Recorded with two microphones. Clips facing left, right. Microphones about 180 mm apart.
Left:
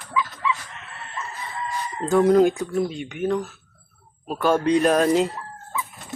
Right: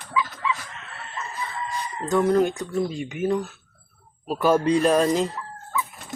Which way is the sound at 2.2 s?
10° left (ahead or behind).